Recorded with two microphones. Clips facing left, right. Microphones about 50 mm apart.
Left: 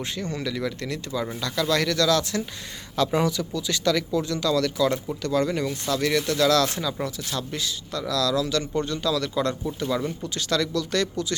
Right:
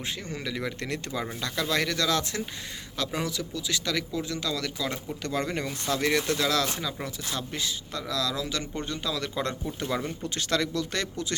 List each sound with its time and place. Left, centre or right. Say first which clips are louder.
0.0 s speech: left 5 dB; centre
0.5 s speech: left 3 dB; right
1.4 s speech: left 4 dB; right
2.9 s speech: left 8 dB; centre
5.2 s speech: left 5 dB; right
10.2 s speech: even; right